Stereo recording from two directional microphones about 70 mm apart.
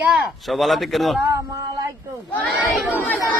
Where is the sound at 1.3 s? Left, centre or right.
Right.